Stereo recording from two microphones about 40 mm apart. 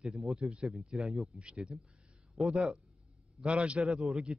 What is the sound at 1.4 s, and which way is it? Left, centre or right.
Speech, right.